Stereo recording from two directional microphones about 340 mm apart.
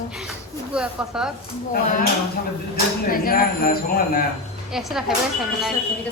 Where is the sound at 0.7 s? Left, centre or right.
Centre.